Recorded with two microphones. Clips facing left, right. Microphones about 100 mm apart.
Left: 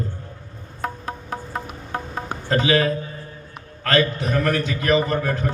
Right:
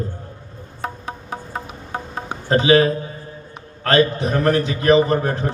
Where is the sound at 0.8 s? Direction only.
Centre (ahead or behind).